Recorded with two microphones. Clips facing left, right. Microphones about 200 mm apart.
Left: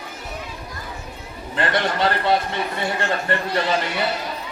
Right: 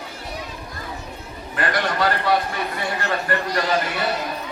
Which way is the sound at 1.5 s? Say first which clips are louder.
Left 1 dB; 25° left (ahead or behind).